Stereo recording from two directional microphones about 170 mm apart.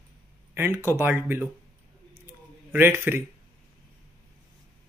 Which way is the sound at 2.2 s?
15° right (ahead or behind).